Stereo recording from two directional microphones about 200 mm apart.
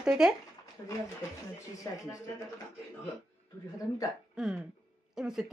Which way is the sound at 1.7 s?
15° left (ahead or behind).